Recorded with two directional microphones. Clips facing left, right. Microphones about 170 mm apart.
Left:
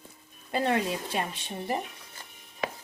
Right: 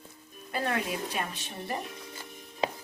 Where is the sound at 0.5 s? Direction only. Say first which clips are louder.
Left 4 dB; 25° left (ahead or behind).